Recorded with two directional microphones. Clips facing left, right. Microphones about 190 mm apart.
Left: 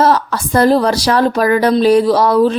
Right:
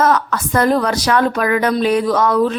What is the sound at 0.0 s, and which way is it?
A woman's voice, 30° left (ahead or behind).